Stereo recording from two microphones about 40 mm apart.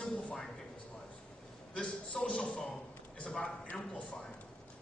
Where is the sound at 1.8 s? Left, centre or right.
Left.